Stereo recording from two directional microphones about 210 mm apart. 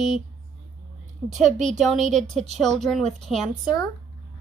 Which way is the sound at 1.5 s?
35° right (ahead or behind).